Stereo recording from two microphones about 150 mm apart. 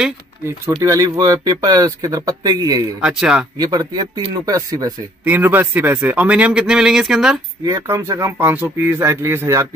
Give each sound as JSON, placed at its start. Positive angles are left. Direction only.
{"t": 0.7, "sound": "speech", "side_deg": -25}
{"t": 3.0, "sound": "speech", "side_deg": -5}
{"t": 3.5, "sound": "speech", "side_deg": -25}
{"t": 7.6, "sound": "speech", "side_deg": -25}